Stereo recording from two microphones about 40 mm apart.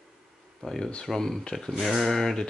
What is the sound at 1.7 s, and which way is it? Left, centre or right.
Speech, centre.